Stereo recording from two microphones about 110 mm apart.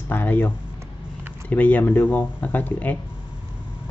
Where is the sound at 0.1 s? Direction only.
15° left (ahead or behind).